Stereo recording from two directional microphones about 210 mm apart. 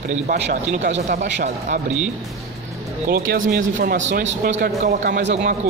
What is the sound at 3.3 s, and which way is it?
Speech, 40° right (ahead or behind).